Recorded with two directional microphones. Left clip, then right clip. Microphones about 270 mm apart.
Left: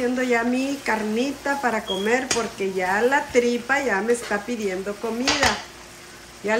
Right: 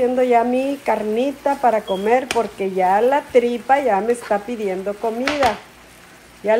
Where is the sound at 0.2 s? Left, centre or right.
Centre.